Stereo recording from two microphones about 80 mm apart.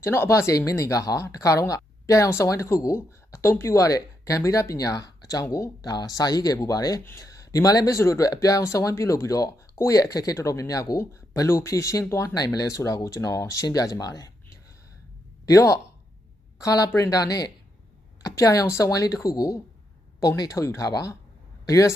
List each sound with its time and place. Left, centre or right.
0.0 s speech: left
15.4 s speech: left